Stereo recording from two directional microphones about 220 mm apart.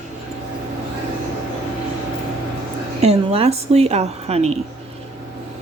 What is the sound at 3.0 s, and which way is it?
A woman's voice, 30° right (ahead or behind).